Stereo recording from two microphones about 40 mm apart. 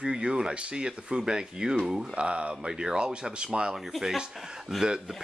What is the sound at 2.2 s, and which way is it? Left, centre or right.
Speech, right.